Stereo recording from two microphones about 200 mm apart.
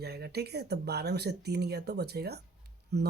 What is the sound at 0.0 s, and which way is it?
Speech, 50° right (ahead or behind).